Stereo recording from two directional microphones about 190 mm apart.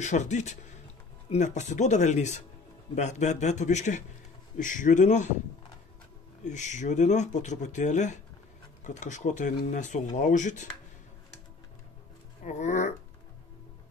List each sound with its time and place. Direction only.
0.0 s speech: 40° left (ahead or behind)
6.4 s speech: 40° left (ahead or behind)
12.4 s speech: 40° left (ahead or behind)